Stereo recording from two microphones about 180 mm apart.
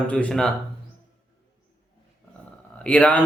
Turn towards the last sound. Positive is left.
turn(degrees=10)  # may be behind; listen again after turning